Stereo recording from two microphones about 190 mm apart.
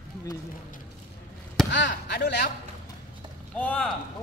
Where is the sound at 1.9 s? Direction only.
45° left (ahead or behind).